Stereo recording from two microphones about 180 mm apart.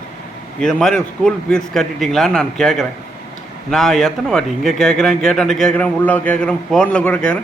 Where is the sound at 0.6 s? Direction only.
5° left (ahead or behind).